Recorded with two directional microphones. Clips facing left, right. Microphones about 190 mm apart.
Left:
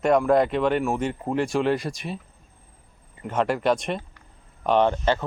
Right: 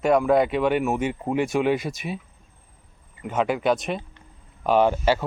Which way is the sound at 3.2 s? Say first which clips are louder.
Even; centre (ahead or behind).